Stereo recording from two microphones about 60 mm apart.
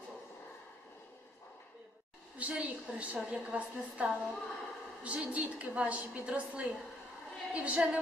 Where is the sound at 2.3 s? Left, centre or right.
Right.